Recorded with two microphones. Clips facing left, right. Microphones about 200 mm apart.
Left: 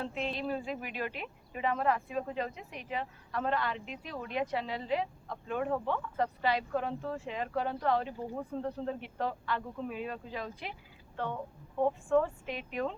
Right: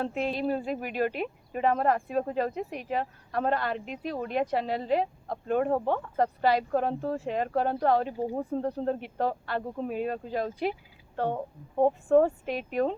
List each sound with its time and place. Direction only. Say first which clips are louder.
0.3 s a woman's voice: right 6 dB; 40° right (ahead or behind)
11.8 s a woman's voice: right 6 dB; 40° right (ahead or behind)